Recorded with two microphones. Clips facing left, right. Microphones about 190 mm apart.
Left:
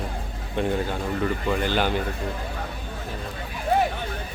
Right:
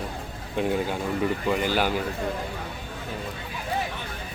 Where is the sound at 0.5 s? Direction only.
10° right (ahead or behind).